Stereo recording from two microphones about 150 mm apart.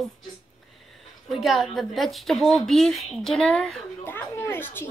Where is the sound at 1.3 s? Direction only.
Centre (ahead or behind).